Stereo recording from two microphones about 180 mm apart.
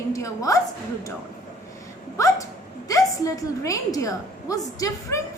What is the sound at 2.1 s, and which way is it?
Hiccup, 15° left (ahead or behind).